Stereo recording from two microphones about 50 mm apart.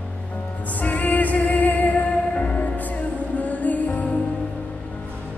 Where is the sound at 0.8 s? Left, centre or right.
Left.